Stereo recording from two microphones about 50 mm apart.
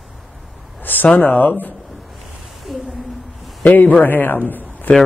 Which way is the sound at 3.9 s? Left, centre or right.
Left.